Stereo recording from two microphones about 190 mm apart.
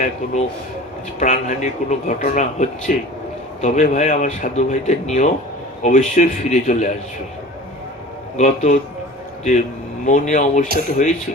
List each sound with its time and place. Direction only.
1.2 s speech: 40° left (ahead or behind)
8.4 s speech: 35° left (ahead or behind)